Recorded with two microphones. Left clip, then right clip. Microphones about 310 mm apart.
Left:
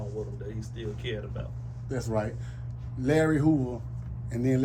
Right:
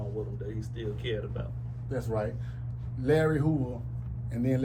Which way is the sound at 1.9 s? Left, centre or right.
Left.